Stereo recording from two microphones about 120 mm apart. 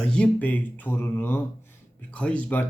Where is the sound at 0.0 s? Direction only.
10° left (ahead or behind).